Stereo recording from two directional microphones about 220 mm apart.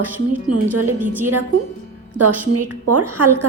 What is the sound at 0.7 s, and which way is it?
Speech, 90° right.